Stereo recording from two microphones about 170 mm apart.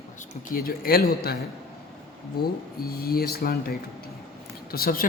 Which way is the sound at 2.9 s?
60° left (ahead or behind).